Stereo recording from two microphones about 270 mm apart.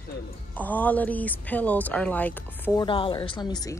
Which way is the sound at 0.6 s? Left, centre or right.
Centre.